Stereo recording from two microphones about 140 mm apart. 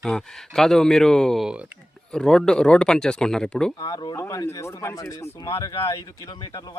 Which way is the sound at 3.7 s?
25° left (ahead or behind).